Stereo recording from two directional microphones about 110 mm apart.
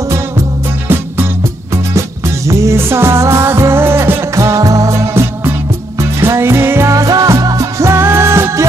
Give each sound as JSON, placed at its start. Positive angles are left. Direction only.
{"t": 2.0, "sound": "music", "side_deg": -25}